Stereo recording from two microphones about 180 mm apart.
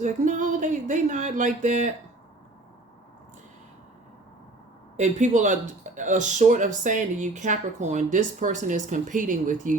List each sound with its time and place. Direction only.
0.0 s speech: 45° right (ahead or behind)
4.9 s speech: 40° right (ahead or behind)